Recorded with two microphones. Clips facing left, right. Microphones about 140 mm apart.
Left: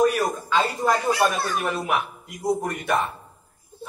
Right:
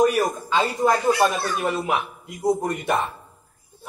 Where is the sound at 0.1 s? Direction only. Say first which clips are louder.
Right 2 dB; 15° right (ahead or behind).